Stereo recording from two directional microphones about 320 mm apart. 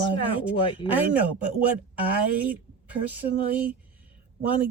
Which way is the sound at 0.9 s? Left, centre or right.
Centre.